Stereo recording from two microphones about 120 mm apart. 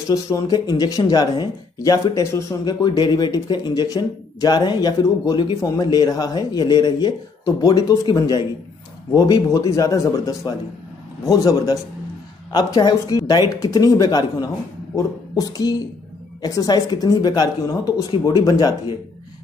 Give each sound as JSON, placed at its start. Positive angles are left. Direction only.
{"t": 0.1, "sound": "speech", "side_deg": 30}